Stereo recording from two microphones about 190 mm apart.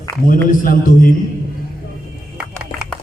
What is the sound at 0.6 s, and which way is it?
Speech, 45° left (ahead or behind).